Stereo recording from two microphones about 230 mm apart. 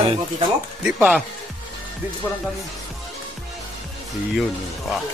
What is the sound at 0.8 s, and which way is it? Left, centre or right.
Speech, centre.